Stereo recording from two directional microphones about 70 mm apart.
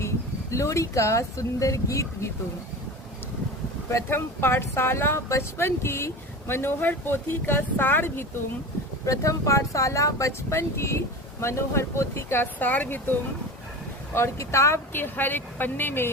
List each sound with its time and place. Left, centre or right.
0.5 s speech: left
4.1 s speech: left
9.0 s speech: left
14.1 s speech: left
14.9 s speech: left